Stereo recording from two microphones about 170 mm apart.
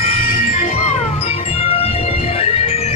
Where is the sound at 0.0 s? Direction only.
40° left (ahead or behind).